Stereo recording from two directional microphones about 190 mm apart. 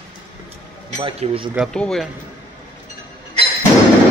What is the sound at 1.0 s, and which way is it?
Speech, 30° right (ahead or behind).